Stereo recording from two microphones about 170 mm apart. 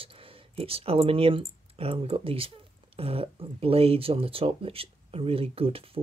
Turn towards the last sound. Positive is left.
turn(degrees=-35)  # may be behind; listen again after turning